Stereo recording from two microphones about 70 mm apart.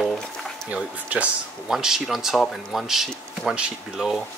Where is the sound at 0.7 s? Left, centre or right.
Centre.